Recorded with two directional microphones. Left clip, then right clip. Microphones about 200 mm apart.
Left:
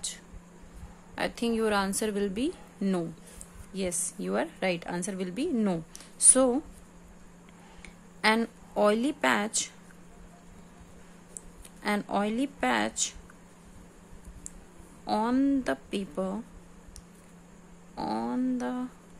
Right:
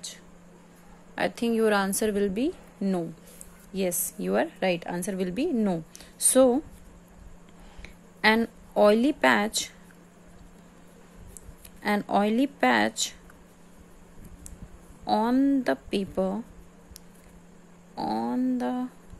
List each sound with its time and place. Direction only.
1.1 s a woman's voice: 15° right (ahead or behind)
3.7 s a woman's voice: 15° right (ahead or behind)
7.8 s a woman's voice: 15° right (ahead or behind)
11.8 s speech: 15° right (ahead or behind)
15.0 s a woman's voice: 10° right (ahead or behind)
17.9 s a woman's voice: 10° right (ahead or behind)